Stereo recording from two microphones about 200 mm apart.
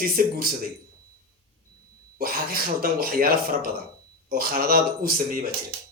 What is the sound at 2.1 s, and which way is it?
A man's voice, 45° right (ahead or behind).